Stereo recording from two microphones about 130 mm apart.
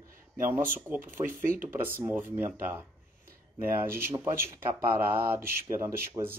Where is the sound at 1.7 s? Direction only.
15° right (ahead or behind).